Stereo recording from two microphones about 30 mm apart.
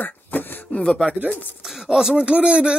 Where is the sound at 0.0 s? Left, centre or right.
Left.